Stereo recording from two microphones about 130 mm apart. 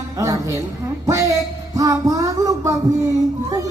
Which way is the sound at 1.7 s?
25° right (ahead or behind).